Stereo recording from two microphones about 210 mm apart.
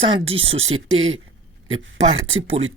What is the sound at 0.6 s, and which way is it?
Speech, 70° right (ahead or behind).